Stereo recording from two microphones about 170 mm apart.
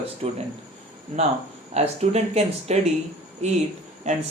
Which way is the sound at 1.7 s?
40° right (ahead or behind).